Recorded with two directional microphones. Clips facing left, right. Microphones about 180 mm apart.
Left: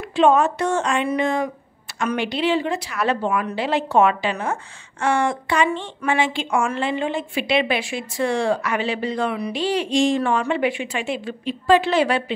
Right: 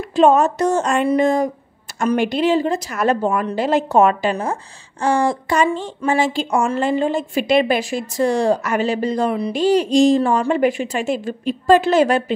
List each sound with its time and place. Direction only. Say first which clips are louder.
0.1 s a woman's voice: right 3 dB; 40° right (ahead or behind)